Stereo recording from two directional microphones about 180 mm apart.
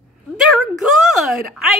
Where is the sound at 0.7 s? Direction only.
Centre (ahead or behind).